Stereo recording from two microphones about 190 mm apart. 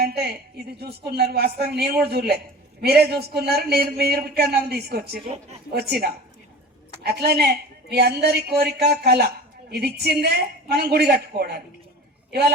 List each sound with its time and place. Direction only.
0.0 s a woman's voice: 55° right (ahead or behind)